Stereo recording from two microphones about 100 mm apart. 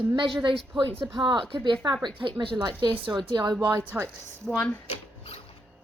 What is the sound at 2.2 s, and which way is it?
Speech, 60° right (ahead or behind).